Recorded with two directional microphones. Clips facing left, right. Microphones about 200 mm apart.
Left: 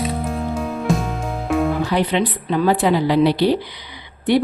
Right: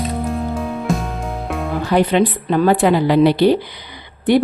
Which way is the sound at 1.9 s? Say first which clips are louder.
Right 4 dB; 50° right (ahead or behind).